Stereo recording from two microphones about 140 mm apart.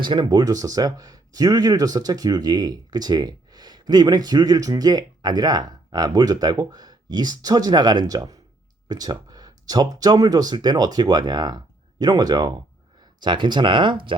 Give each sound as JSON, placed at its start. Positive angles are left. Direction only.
{"t": 0.0, "sound": "speech", "side_deg": -35}